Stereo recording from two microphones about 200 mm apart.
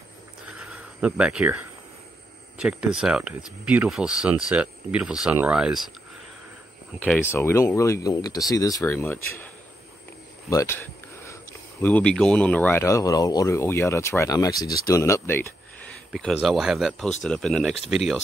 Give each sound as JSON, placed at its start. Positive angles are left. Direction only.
{"t": 0.6, "sound": "cricket", "side_deg": -5}
{"t": 2.5, "sound": "speech", "side_deg": -5}
{"t": 7.3, "sound": "speech", "side_deg": 15}
{"t": 10.5, "sound": "speech", "side_deg": 15}
{"t": 11.8, "sound": "speech", "side_deg": 5}
{"t": 16.1, "sound": "speech", "side_deg": 0}